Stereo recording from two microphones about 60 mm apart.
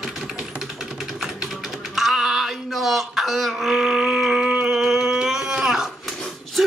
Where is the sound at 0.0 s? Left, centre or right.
Centre.